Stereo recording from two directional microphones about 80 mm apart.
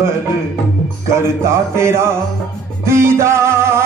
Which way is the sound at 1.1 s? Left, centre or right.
Right.